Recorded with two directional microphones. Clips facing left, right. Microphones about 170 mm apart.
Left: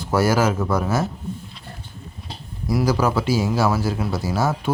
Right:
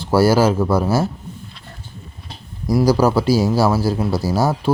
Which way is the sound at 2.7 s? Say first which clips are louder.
Right 5 dB; 35° right (ahead or behind).